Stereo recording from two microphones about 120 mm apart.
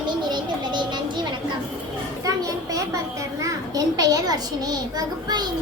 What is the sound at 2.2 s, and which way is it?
A child's voice, 30° right (ahead or behind).